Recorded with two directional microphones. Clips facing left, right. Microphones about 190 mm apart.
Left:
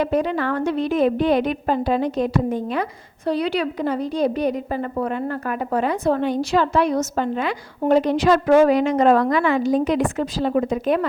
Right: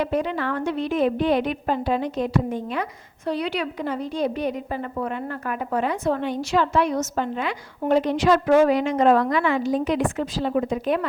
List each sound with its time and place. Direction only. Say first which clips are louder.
0.0 s a woman's voice: left 3 dB; 40° left (ahead or behind)